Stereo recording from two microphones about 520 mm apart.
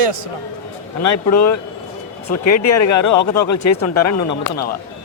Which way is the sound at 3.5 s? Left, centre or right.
Left.